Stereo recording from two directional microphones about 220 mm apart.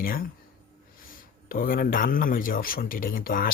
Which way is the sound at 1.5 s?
40° left (ahead or behind).